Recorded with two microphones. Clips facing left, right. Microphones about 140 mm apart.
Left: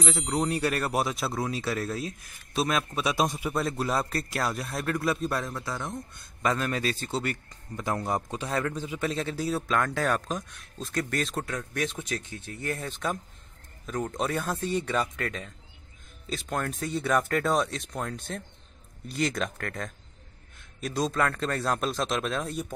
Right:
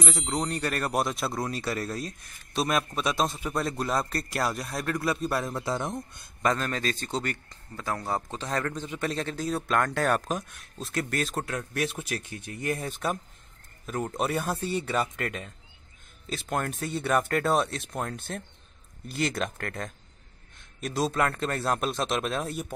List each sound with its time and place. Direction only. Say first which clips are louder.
0.0 s speech: left 2 dB; centre (ahead or behind)
5.5 s speech: right 4 dB; 20° right (ahead or behind)
6.4 s a man's voice: even; 10° left (ahead or behind)
7.7 s speech: left 2 dB; 20° left (ahead or behind); by 22.7 s 5° right (ahead or behind)